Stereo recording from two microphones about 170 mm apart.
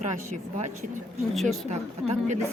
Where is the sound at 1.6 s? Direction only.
40° right (ahead or behind).